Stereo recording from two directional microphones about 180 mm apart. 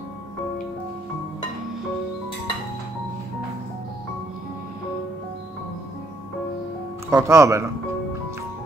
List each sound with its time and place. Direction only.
7.1 s speech: 15° right (ahead or behind)